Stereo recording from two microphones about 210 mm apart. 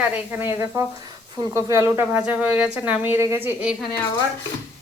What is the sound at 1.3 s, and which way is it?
A child's voice, 15° right (ahead or behind).